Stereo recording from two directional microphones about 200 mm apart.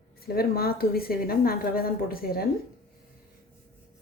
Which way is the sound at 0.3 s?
50° left (ahead or behind).